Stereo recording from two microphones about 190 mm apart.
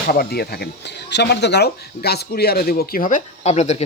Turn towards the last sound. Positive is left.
turn(degrees=35)  # may be behind; listen again after turning